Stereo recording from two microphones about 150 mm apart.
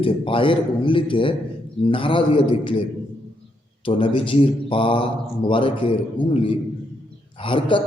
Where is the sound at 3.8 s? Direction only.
35° left (ahead or behind).